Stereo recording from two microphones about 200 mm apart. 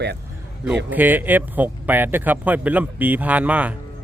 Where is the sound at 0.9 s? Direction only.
10° right (ahead or behind).